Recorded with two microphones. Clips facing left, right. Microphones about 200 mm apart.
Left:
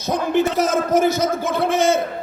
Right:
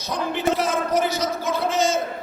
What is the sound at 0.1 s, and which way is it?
A man's voice, 45° left (ahead or behind).